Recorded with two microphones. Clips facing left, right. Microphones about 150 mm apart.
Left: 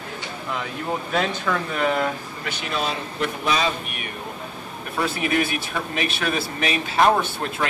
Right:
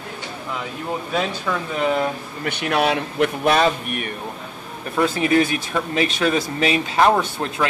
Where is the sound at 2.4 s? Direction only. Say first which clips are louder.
Right 7 dB; 60° right (ahead or behind).